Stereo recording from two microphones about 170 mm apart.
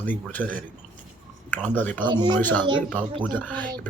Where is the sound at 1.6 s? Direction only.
10° left (ahead or behind).